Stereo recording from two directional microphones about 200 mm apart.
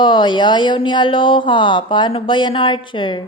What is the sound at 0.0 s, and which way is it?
Speech, 20° left (ahead or behind).